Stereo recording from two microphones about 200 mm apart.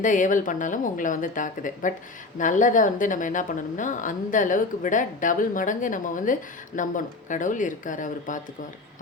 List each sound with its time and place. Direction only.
0.0 s a woman's voice: 40° left (ahead or behind)